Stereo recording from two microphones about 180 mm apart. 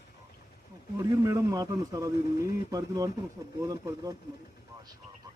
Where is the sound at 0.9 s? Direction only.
15° right (ahead or behind).